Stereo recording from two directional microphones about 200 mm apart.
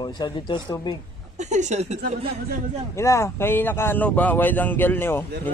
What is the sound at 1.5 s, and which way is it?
Speech, 35° right (ahead or behind).